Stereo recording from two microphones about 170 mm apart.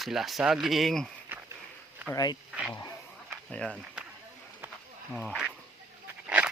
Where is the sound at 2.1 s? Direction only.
20° left (ahead or behind).